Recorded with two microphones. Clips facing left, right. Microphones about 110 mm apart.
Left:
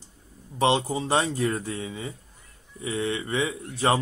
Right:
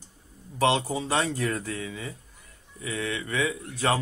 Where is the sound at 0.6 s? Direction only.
25° left (ahead or behind).